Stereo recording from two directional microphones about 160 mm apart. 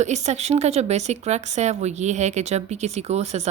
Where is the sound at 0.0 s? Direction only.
45° right (ahead or behind).